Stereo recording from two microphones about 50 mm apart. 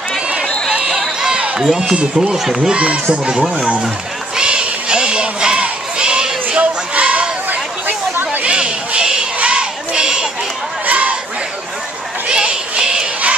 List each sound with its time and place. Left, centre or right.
0.7 s run: centre
1.6 s speech: centre
2.0 s speech: right
2.3 s speech: centre
2.7 s speech: right
4.4 s crowd: centre
8.5 s crowd: right
10.9 s a sound: right
12.3 s a sound: centre